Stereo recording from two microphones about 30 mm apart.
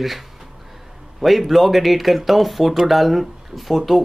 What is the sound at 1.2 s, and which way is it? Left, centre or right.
Speech, centre.